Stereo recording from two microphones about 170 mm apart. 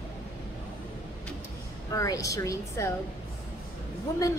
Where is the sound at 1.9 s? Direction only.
20° left (ahead or behind).